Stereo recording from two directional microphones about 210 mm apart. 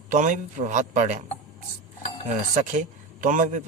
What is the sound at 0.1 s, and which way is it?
A man's voice, 35° right (ahead or behind).